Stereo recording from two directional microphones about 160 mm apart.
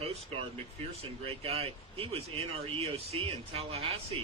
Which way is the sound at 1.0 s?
35° right (ahead or behind).